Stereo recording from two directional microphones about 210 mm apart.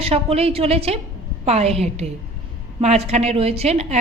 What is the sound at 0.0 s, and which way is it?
A woman's voice, 30° right (ahead or behind).